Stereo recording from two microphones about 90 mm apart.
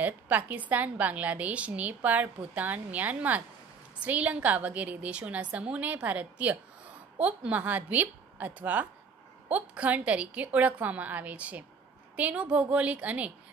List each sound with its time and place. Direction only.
0.0 s a woman's voice: 20° right (ahead or behind)